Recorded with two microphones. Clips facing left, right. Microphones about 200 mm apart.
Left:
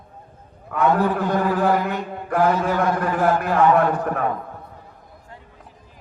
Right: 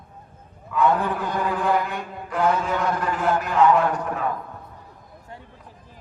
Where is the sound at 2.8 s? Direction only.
55° left (ahead or behind).